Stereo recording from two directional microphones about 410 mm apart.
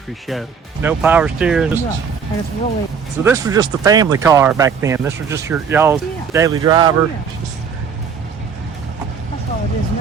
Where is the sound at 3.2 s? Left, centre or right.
Centre.